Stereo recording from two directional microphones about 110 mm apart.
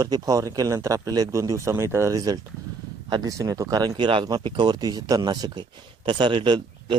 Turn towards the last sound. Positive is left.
turn(degrees=-45)  # may be behind; listen again after turning